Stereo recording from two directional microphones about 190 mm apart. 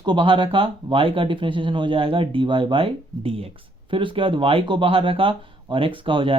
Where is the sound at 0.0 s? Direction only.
25° right (ahead or behind).